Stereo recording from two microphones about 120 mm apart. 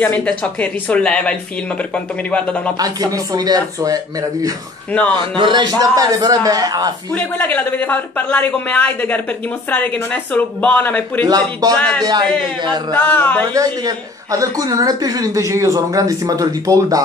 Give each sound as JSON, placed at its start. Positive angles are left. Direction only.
{"t": 0.0, "sound": "a man's voice", "side_deg": 10}
{"t": 2.8, "sound": "a man's voice", "side_deg": -35}
{"t": 5.1, "sound": "a man's voice", "side_deg": -40}
{"t": 7.2, "sound": "a man's voice", "side_deg": 15}
{"t": 10.3, "sound": "a man's voice", "side_deg": 15}
{"t": 11.2, "sound": "a man's voice", "side_deg": -35}
{"t": 11.7, "sound": "a man's voice", "side_deg": 10}
{"t": 12.0, "sound": "a man's voice", "side_deg": -35}
{"t": 12.9, "sound": "a man's voice", "side_deg": 15}
{"t": 13.5, "sound": "a woman's voice", "side_deg": -30}